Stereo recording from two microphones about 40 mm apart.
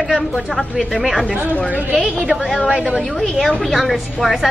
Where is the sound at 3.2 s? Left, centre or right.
Centre.